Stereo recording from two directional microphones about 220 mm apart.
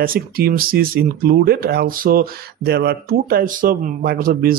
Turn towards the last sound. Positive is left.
turn(degrees=-40)  # may be behind; listen again after turning